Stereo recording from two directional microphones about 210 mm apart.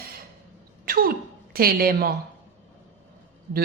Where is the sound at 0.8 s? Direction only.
45° right (ahead or behind).